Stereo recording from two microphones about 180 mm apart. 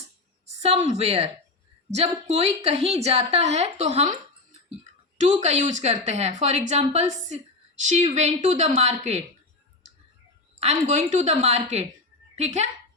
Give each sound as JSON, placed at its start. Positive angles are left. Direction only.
{"t": 0.6, "sound": "a woman's voice", "side_deg": -40}
{"t": 10.6, "sound": "a woman's voice", "side_deg": -35}